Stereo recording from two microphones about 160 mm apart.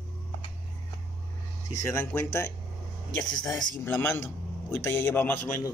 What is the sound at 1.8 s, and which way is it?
Speech, 15° left (ahead or behind).